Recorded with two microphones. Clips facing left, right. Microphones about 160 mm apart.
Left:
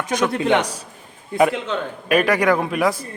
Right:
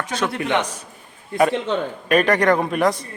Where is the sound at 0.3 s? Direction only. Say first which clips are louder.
Left 3 dB; 20° left (ahead or behind).